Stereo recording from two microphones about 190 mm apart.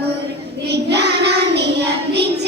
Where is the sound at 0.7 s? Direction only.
60° right (ahead or behind).